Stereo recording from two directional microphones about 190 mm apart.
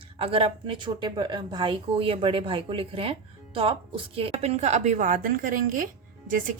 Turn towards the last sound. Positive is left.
turn(degrees=-45)  # may be behind; listen again after turning